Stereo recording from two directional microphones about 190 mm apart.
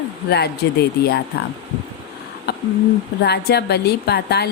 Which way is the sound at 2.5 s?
60° left (ahead or behind).